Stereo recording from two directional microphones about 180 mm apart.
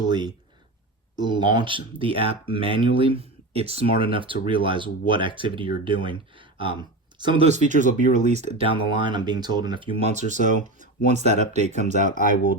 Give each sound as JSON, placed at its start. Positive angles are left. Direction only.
{"t": 0.1, "sound": "speech", "side_deg": -25}
{"t": 10.1, "sound": "speech", "side_deg": -40}
{"t": 11.9, "sound": "speech", "side_deg": 50}